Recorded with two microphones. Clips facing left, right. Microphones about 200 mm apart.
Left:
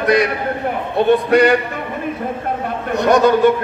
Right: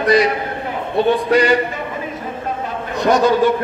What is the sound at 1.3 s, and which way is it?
Speech, 60° left (ahead or behind).